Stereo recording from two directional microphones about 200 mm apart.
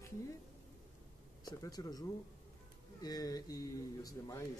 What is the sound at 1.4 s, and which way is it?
A man's voice, 20° left (ahead or behind).